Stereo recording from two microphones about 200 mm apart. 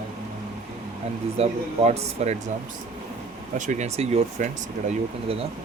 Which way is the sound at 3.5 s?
40° right (ahead or behind).